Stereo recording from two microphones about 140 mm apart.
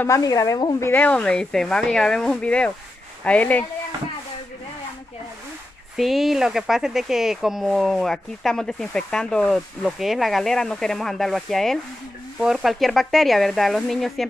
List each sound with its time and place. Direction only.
0.0 s speech: 25° left (ahead or behind)
0.8 s speech: 10° left (ahead or behind)
5.9 s speech: centre (ahead or behind)